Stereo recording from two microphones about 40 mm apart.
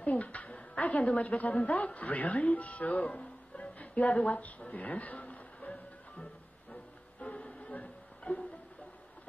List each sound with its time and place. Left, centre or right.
0.0 s a woman's voice: left
6.7 s music: left